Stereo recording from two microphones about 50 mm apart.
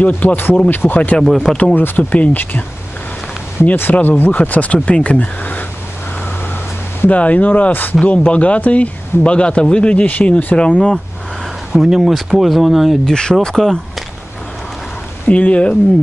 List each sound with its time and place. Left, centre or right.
0.0 s speech: left
1.1 s speech: centre
1.8 s speech: left
3.7 s speech: left
7.1 s speech: left
8.0 s speech: left
11.7 s speech: centre
13.0 s speech: centre
15.2 s speech: left